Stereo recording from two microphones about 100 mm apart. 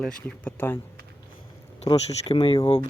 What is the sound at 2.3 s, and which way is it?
Speech, 65° left (ahead or behind).